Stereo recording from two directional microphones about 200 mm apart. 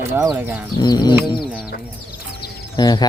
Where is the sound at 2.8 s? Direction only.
20° left (ahead or behind).